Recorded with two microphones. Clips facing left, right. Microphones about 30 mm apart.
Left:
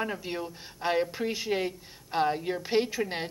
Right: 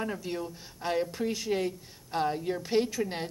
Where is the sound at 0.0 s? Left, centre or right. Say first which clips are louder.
Left 1 dB; left.